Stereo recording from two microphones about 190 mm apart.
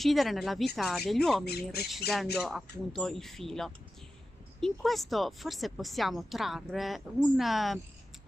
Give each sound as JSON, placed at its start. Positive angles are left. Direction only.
{"t": 0.0, "sound": "speech", "side_deg": 0}
{"t": 1.4, "sound": "speech", "side_deg": 55}
{"t": 2.3, "sound": "speech", "side_deg": 0}